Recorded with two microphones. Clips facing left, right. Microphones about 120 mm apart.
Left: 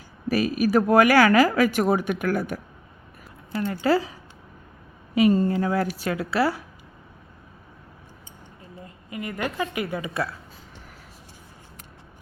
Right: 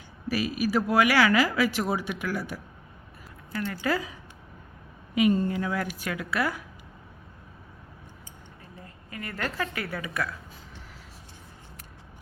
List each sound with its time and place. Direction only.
0.3 s speech: 45° left (ahead or behind)
3.5 s speech: 25° left (ahead or behind)
5.1 s a woman's voice: 35° left (ahead or behind)
8.8 s a woman's voice: 15° left (ahead or behind)